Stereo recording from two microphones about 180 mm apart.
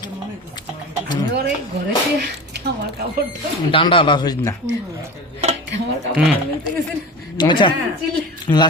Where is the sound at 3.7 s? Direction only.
30° left (ahead or behind).